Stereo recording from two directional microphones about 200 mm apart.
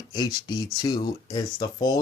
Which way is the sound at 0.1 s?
20° left (ahead or behind).